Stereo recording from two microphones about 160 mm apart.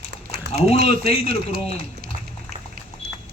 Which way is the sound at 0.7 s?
40° left (ahead or behind).